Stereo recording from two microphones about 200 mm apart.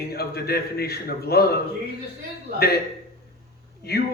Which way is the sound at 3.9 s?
50° left (ahead or behind).